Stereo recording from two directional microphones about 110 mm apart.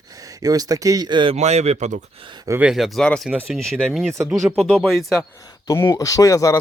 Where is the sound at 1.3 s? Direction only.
80° right.